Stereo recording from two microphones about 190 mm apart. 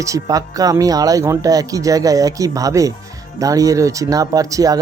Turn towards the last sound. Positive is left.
turn(degrees=-20)  # may be behind; listen again after turning